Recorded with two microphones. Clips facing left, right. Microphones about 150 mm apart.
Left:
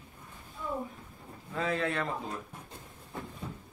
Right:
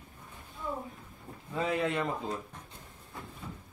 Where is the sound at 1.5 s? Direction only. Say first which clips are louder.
Right 1 dB; 10° right (ahead or behind).